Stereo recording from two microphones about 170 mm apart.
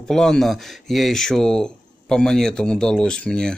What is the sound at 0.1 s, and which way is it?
Speech, 5° left (ahead or behind).